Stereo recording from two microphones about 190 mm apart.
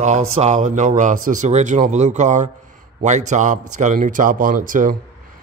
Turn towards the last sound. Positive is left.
turn(degrees=-45)  # may be behind; listen again after turning